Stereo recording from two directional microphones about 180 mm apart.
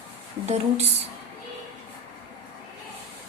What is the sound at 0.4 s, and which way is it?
Speech, 35° right (ahead or behind).